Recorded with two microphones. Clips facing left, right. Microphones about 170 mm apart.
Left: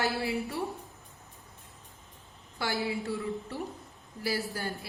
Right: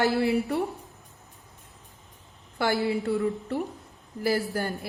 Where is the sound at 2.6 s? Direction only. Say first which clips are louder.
Right 7 dB; 55° right (ahead or behind).